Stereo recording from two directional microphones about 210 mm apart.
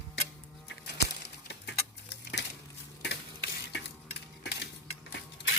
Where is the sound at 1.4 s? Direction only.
55° left (ahead or behind).